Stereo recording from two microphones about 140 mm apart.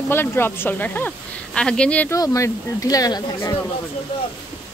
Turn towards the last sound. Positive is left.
turn(degrees=25)  # may be behind; listen again after turning